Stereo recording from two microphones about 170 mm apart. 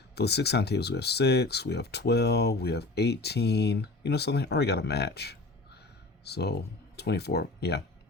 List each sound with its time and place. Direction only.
0.2 s speech: 75° left (ahead or behind)